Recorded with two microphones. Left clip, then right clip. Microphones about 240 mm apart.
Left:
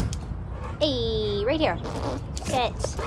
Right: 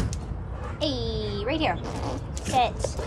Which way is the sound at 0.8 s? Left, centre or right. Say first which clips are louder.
Left 4 dB; left.